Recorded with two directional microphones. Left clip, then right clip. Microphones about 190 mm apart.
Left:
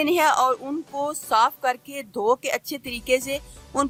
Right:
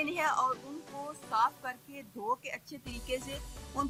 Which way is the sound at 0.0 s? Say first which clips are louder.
Left 11 dB; 55° left (ahead or behind).